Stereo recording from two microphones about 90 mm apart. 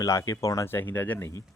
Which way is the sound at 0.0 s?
40° left (ahead or behind).